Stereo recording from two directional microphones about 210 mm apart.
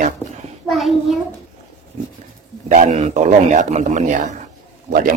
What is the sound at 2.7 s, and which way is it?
Speech, 35° right (ahead or behind).